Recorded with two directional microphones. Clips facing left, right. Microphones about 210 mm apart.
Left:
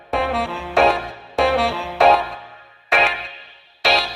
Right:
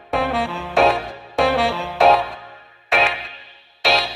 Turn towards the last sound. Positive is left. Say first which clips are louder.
# even
turn(degrees=0)  # may be behind; listen again after turning